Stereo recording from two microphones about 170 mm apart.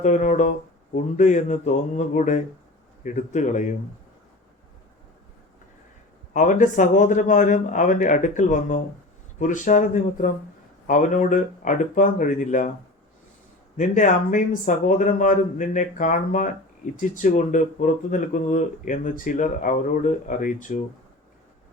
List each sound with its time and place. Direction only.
0.0 s speech: 45° left (ahead or behind)
6.3 s speech: 50° left (ahead or behind)
13.7 s speech: 50° left (ahead or behind)